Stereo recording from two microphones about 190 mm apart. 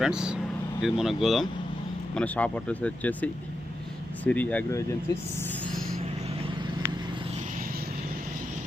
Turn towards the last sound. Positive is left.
turn(degrees=-50)  # may be behind; listen again after turning